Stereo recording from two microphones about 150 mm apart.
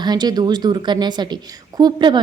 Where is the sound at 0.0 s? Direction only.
30° right (ahead or behind).